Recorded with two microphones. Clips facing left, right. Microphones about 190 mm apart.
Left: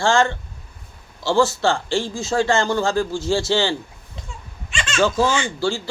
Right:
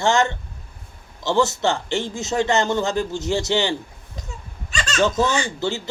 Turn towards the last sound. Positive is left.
turn(degrees=-20)  # may be behind; listen again after turning